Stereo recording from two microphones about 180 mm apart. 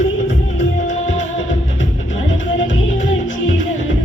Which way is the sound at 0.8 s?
40° left (ahead or behind).